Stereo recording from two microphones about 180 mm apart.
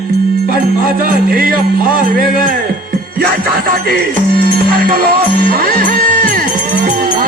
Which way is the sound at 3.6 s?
55° right (ahead or behind).